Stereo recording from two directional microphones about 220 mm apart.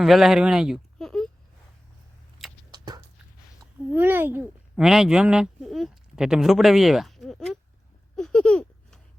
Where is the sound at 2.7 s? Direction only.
20° right (ahead or behind).